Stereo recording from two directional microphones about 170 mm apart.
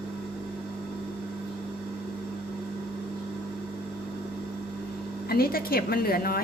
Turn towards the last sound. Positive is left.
turn(degrees=60)  # may be behind; listen again after turning